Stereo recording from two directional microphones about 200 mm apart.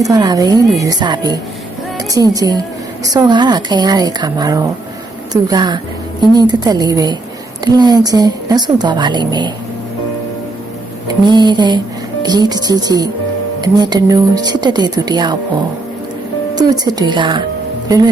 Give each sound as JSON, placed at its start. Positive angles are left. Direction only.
{"t": 0.0, "sound": "a woman's voice", "side_deg": -20}
{"t": 11.1, "sound": "a woman's voice", "side_deg": -20}
{"t": 16.6, "sound": "a woman's voice", "side_deg": -20}